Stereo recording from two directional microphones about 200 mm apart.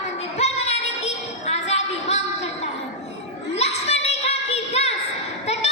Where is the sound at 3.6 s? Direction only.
30° left (ahead or behind).